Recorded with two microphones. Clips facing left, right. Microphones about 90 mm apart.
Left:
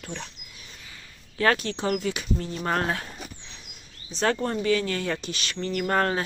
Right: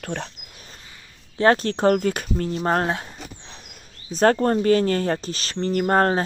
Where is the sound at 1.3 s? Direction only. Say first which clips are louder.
Right 5 dB; 30° right (ahead or behind); by 2.6 s 50° right (ahead or behind).